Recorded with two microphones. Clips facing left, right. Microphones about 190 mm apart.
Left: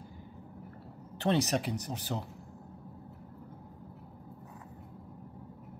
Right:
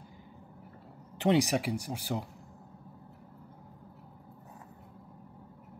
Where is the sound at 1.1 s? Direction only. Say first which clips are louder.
Right 3 dB; 15° right (ahead or behind).